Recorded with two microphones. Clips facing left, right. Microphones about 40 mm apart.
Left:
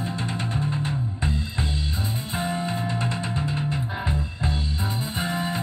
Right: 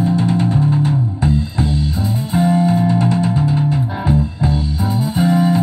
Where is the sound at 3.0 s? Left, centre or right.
Centre.